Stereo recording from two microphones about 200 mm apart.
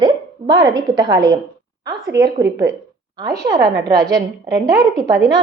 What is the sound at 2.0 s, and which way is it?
Speech, 55° right (ahead or behind).